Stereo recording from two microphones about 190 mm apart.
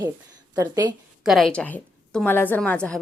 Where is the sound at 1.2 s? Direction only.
Centre (ahead or behind).